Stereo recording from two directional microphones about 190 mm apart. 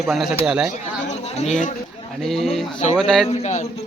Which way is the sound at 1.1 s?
35° left (ahead or behind).